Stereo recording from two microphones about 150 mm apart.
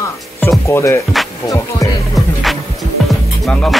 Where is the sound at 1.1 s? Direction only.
Centre (ahead or behind).